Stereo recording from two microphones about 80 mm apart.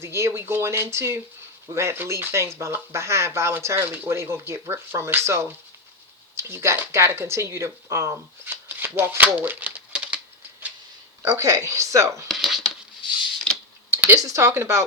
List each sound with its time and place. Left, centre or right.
0.0 s speech: right
8.7 s shuffling cards: right
11.3 s speech: right
12.3 s a sound: centre
14.2 s speech: right